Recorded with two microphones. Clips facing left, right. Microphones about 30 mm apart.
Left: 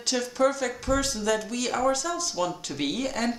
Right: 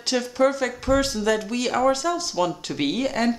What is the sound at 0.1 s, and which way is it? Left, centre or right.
Speech, right.